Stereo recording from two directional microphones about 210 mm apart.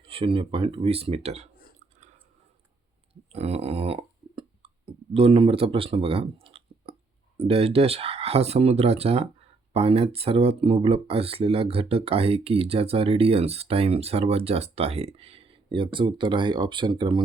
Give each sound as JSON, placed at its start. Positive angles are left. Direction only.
{"t": 0.0, "sound": "speech", "side_deg": -25}
{"t": 3.3, "sound": "a sound", "side_deg": -30}
{"t": 7.3, "sound": "speech", "side_deg": -25}